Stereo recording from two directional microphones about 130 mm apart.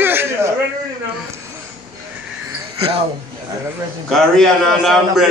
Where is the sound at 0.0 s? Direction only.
15° right (ahead or behind).